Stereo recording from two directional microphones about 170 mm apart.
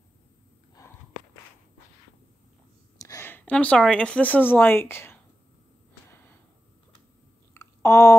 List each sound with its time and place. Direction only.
0.8 s walk: 20° left (ahead or behind)
3.0 s speech: 15° left (ahead or behind)
7.5 s a sound: 20° left (ahead or behind)